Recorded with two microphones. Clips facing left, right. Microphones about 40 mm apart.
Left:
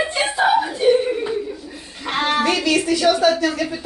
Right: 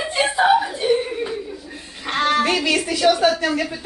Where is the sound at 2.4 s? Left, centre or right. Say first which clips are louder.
Even; centre.